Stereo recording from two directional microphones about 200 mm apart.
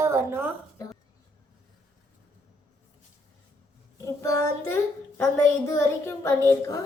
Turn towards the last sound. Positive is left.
turn(degrees=15)  # may be behind; listen again after turning